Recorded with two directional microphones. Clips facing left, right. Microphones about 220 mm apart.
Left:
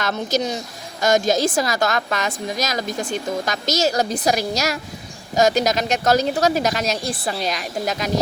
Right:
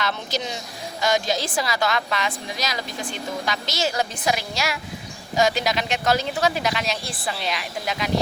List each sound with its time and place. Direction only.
0.0 s a woman's voice: 45° left (ahead or behind)